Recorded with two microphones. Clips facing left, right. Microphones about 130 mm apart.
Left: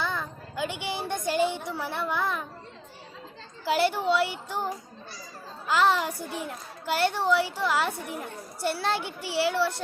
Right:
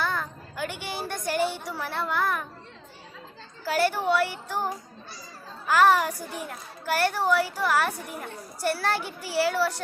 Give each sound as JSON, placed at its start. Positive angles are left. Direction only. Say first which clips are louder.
{"t": 0.0, "sound": "a sound", "louder": "right 2 dB", "side_deg": 20}
{"t": 1.8, "sound": "a child's voice", "louder": "right 2 dB", "side_deg": 15}
{"t": 3.7, "sound": "a child's voice", "louder": "even", "side_deg": 20}
{"t": 5.6, "sound": "a child's voice", "louder": "right 3 dB", "side_deg": 20}